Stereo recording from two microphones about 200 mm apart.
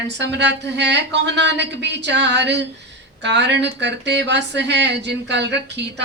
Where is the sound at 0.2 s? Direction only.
60° right (ahead or behind).